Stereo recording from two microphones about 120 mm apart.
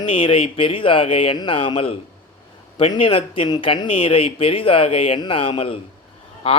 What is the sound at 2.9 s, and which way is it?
Speech, 45° left (ahead or behind).